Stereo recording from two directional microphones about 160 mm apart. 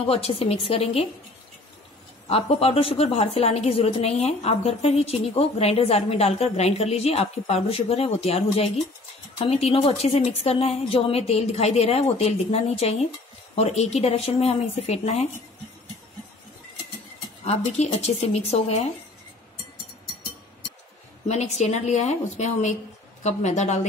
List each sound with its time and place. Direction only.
0.0 s a woman's voice: 40° left (ahead or behind)
2.2 s a woman's voice: 40° left (ahead or behind)
17.5 s a woman's voice: 40° left (ahead or behind)
21.3 s a woman's voice: 45° left (ahead or behind)